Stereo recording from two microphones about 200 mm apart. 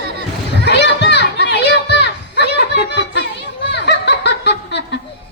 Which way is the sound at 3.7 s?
60° left (ahead or behind).